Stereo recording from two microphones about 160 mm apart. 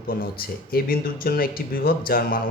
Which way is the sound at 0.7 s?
65° left (ahead or behind).